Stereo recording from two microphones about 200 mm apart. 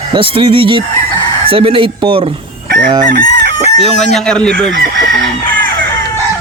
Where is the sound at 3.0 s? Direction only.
45° right (ahead or behind).